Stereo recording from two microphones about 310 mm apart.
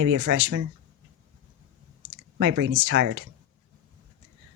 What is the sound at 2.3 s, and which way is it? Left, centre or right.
Speech, right.